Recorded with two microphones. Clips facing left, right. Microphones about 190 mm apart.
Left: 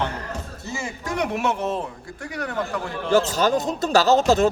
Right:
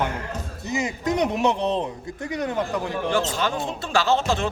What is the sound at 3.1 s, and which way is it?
Speech, 40° left (ahead or behind).